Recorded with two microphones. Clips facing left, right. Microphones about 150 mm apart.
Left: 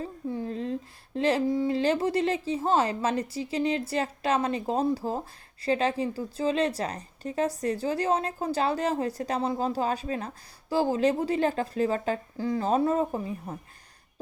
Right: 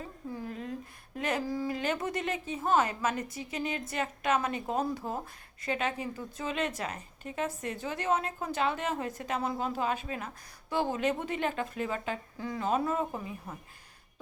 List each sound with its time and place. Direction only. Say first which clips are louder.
0.0 s speech: left 7 dB; 30° left (ahead or behind)